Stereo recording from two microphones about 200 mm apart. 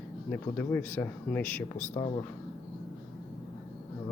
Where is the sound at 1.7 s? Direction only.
35° left (ahead or behind).